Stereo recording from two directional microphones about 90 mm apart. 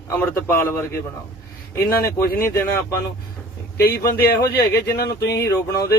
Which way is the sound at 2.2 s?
30° left (ahead or behind).